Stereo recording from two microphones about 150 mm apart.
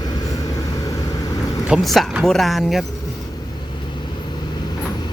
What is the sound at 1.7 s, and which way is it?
Speech, 5° right (ahead or behind).